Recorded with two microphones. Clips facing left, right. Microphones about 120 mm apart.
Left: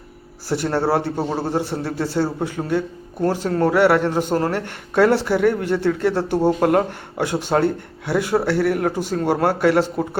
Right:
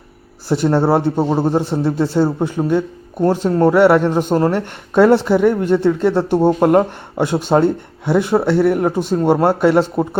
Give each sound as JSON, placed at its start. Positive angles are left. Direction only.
{"t": 0.4, "sound": "a man's voice", "side_deg": -20}